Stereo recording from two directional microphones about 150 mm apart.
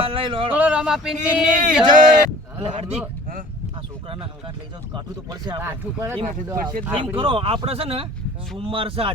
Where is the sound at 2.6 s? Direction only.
45° right (ahead or behind).